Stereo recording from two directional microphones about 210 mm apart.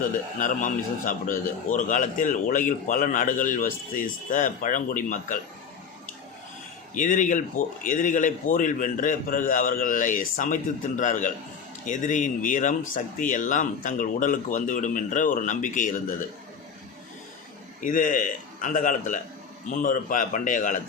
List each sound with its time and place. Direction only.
0.0 s a man's voice: 40° left (ahead or behind)
6.9 s a man's voice: 35° left (ahead or behind)
17.7 s a man's voice: 40° left (ahead or behind)